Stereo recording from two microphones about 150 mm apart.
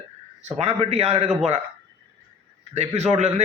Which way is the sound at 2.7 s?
45° right (ahead or behind).